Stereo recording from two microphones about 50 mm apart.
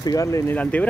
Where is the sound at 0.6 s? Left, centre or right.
Left.